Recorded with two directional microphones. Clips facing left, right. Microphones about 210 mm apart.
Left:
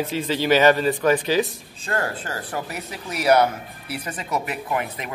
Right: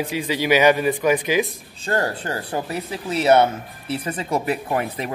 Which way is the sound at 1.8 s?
30° right (ahead or behind).